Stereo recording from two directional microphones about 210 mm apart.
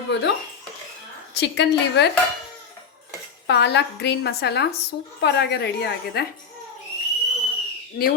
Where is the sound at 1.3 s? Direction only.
55° left (ahead or behind).